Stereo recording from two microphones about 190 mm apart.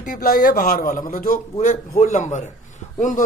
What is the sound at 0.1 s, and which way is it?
A man's voice, 45° left (ahead or behind).